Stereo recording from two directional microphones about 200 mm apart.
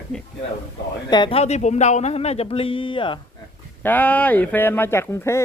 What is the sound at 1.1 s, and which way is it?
Speech, 25° left (ahead or behind).